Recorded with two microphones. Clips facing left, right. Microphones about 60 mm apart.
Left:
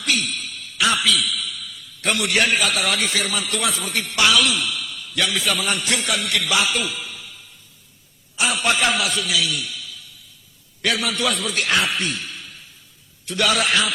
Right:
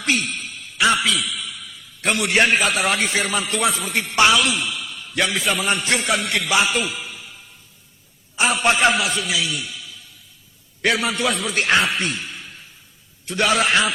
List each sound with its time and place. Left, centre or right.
0.0 s a man's voice: right
8.4 s a man's voice: right